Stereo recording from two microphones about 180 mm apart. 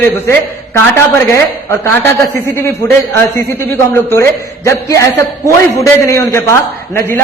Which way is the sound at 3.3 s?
15° left (ahead or behind).